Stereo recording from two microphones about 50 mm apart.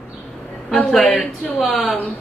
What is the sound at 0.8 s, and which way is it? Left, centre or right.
Speech, centre.